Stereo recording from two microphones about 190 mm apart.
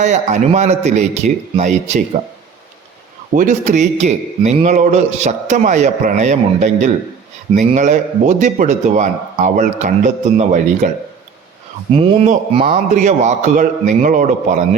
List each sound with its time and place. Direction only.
0.0 s a man's voice: 40° right (ahead or behind)
3.3 s a man's voice: 40° right (ahead or behind)